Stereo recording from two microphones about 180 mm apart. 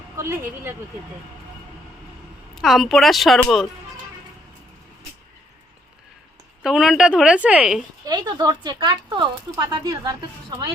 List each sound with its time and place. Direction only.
0.2 s speech: 15° right (ahead or behind)
2.6 s a woman's voice: centre (ahead or behind)
6.6 s a woman's voice: 5° right (ahead or behind)
8.0 s speech: 25° right (ahead or behind)